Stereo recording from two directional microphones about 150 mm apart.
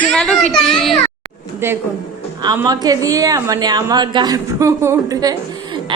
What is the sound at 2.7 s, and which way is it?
A woman's voice, 25° right (ahead or behind).